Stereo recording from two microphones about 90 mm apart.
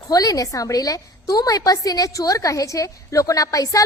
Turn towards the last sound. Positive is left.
turn(degrees=40)  # may be behind; listen again after turning